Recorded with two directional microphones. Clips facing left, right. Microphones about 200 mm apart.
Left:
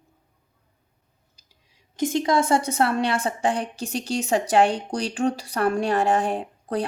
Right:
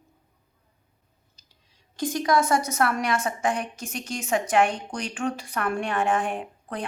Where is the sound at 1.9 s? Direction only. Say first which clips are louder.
Left 2 dB; 25° left (ahead or behind).